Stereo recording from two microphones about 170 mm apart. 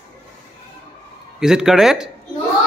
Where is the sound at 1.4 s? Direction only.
5° right (ahead or behind).